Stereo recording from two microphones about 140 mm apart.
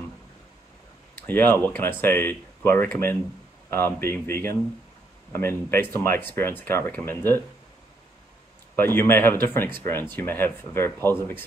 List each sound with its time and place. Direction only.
1.2 s speech: 15° left (ahead or behind)
8.7 s speech: 15° left (ahead or behind)